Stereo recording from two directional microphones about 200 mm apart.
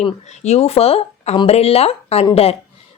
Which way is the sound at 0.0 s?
35° left (ahead or behind).